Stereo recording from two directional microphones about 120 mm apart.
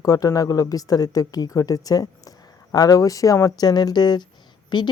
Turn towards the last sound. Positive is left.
turn(degrees=40)  # may be behind; listen again after turning